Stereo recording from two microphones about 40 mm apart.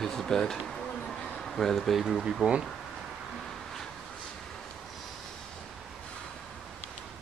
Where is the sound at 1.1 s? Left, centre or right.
Centre.